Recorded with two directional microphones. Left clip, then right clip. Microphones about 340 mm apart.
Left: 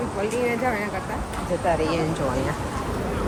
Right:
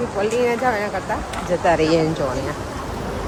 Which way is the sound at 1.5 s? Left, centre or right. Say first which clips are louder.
Right 6 dB; right.